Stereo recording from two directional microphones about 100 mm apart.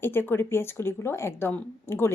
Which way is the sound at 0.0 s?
20° left (ahead or behind).